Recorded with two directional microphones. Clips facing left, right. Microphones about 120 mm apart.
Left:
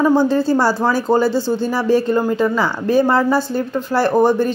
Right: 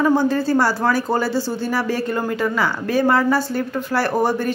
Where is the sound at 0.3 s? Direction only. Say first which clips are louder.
Left 3 dB; 25° left (ahead or behind).